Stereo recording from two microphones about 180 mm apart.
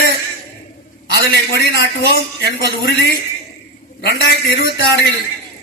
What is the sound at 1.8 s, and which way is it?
Speech, 60° left (ahead or behind).